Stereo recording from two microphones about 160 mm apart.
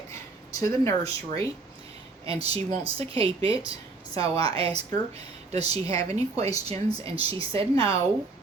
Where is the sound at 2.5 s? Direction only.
35° right (ahead or behind).